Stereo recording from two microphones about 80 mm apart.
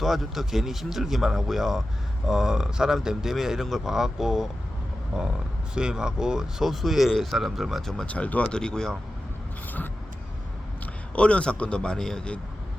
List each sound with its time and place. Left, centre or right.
0.0 s speech: centre
8.0 s a man's voice: centre
11.1 s a man's voice: centre